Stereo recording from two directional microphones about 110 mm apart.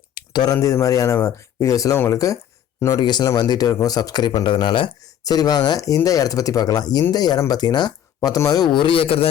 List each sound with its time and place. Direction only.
0.1 s a sound: 45° left (ahead or behind)
0.5 s speech: 30° left (ahead or behind); by 4.9 s 50° left (ahead or behind)
5.2 s speech: 35° left (ahead or behind); by 9.3 s 60° left (ahead or behind)